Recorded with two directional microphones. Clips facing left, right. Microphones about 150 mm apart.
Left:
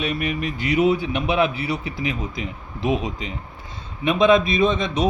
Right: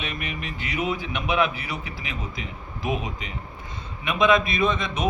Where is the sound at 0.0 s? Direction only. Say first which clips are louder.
Left 8 dB; 40° left (ahead or behind).